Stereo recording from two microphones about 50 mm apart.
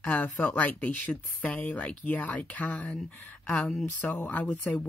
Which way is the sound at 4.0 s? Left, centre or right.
Left.